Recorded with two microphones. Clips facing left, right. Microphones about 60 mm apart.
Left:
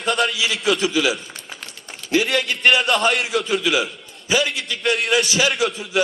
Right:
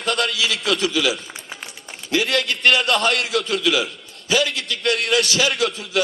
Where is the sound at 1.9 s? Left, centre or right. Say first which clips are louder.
Left 1 dB; centre.